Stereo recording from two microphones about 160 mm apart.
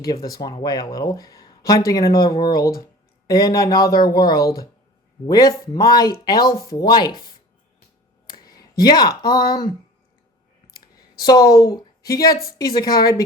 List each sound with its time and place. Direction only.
0.6 s speech: 25° left (ahead or behind)
2.0 s speech: 70° left (ahead or behind)
2.4 s speech: 25° left (ahead or behind)
8.3 s a sound: 25° left (ahead or behind)
8.8 s speech: 25° left (ahead or behind)
11.1 s speech: 25° left (ahead or behind)